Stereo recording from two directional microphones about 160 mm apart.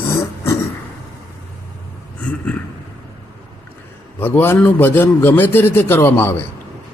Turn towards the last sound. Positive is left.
turn(degrees=15)  # may be behind; listen again after turning